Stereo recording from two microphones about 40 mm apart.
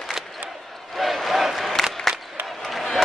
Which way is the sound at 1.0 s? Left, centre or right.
Centre.